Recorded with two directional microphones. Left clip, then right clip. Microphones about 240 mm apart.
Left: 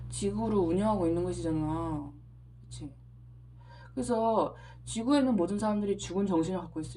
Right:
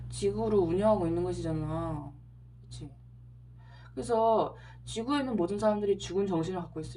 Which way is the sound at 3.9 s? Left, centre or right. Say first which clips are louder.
Right 2 dB; left.